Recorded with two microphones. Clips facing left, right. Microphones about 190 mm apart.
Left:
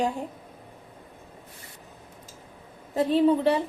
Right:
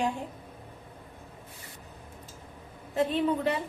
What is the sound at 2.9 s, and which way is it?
Speech, 35° left (ahead or behind).